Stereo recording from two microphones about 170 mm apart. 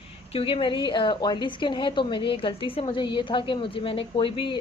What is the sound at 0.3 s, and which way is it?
A woman's voice, 30° left (ahead or behind).